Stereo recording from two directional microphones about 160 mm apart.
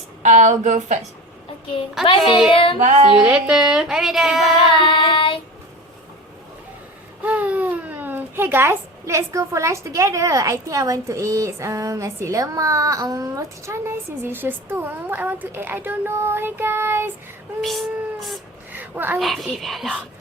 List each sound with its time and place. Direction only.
0.2 s a woman's voice: 50° right (ahead or behind)
2.0 s child singing: 30° left (ahead or behind)
3.1 s a woman's voice: 5° right (ahead or behind)
4.6 s child singing: 30° left (ahead or behind)
7.2 s a child's voice: 10° right (ahead or behind)
17.6 s a woman's voice: centre (ahead or behind)
18.7 s a sound: 10° right (ahead or behind)
19.2 s a woman's voice: centre (ahead or behind)